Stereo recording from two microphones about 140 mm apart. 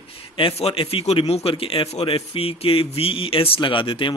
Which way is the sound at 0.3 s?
40° left (ahead or behind).